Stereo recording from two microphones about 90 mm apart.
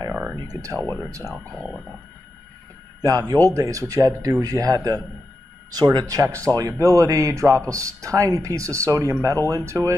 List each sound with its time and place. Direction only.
0.1 s a sound: 10° right (ahead or behind)
0.4 s a man's voice: 45° right (ahead or behind)
3.0 s a man's voice: 45° right (ahead or behind)